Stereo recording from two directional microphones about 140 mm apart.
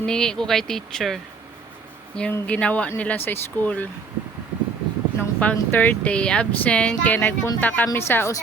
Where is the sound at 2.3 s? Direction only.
10° left (ahead or behind).